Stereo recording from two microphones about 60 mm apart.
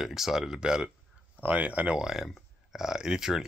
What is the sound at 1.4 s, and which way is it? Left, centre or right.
Speech, right.